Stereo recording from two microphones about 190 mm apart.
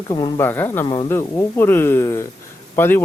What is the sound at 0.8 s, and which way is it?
Speech, 25° left (ahead or behind).